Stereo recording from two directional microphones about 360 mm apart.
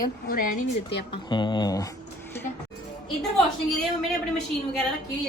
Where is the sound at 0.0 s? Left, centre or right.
Left.